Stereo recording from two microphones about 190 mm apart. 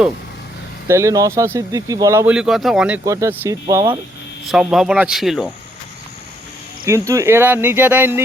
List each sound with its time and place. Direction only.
0.9 s speech: 15° right (ahead or behind)
3.0 s speech: 15° right (ahead or behind)
4.4 s speech: 5° right (ahead or behind)
6.8 s speech: 15° right (ahead or behind)